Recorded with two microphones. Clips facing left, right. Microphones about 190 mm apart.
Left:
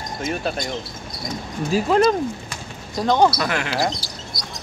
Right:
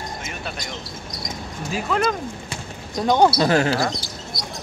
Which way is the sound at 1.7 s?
35° left (ahead or behind).